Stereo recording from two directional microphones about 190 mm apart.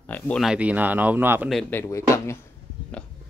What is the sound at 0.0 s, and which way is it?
Speech, 10° left (ahead or behind).